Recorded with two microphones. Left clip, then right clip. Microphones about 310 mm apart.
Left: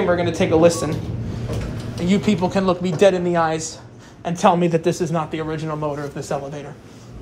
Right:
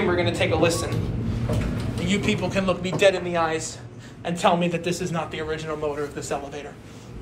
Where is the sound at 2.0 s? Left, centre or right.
Centre.